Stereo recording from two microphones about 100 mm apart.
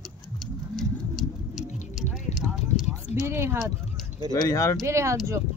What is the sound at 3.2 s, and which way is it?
Speech, 25° right (ahead or behind).